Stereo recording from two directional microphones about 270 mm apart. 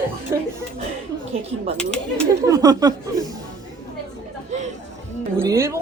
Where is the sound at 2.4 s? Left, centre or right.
Centre.